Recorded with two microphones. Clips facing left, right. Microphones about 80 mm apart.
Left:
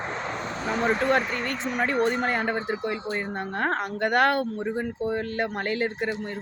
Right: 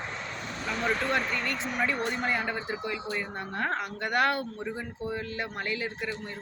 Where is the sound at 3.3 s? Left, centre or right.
Left.